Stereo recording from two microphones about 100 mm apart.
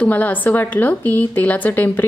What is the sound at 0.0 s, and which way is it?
A woman's voice, 15° left (ahead or behind).